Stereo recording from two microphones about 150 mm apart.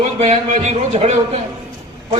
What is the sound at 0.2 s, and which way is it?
A man's voice, 45° right (ahead or behind).